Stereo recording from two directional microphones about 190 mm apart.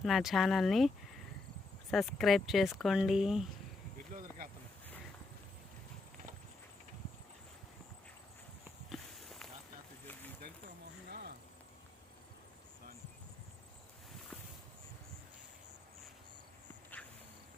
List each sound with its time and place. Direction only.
0.0 s speech: centre (ahead or behind)
1.9 s speech: centre (ahead or behind)
4.1 s insect: 45° right (ahead or behind)
8.9 s walk: centre (ahead or behind)
11.1 s a sound: 55° right (ahead or behind)
17.0 s insect: 5° left (ahead or behind)